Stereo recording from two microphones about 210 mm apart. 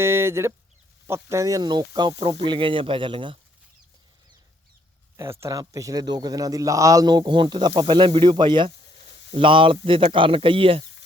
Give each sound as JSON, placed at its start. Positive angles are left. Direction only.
{"t": 0.0, "sound": "a man's voice", "side_deg": -10}
{"t": 5.1, "sound": "a man's voice", "side_deg": -15}